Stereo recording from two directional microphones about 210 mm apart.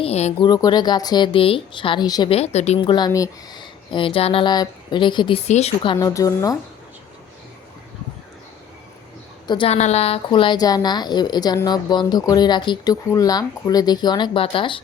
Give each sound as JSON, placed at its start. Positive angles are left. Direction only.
{"t": 0.0, "sound": "speech", "side_deg": 30}
{"t": 9.5, "sound": "speech", "side_deg": 25}